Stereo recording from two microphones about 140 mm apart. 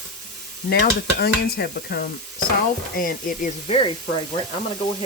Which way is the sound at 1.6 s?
90° left.